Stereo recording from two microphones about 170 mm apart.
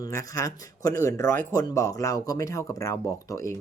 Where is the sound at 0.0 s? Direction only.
20° left (ahead or behind).